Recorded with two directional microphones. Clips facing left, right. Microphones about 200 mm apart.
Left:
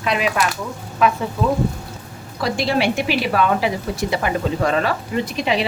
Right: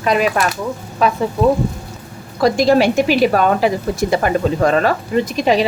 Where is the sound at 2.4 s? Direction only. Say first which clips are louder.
Right 7 dB; 45° right (ahead or behind).